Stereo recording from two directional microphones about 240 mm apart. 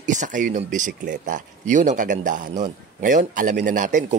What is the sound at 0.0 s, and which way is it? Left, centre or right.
Speech, right.